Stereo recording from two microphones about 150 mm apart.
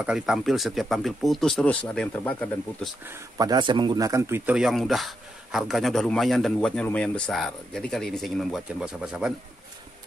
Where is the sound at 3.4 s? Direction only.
30° right (ahead or behind).